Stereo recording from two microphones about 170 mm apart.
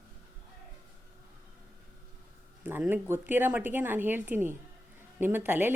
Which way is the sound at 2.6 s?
10° right (ahead or behind).